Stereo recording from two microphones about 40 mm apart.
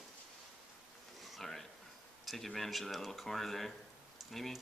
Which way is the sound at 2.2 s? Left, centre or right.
Centre.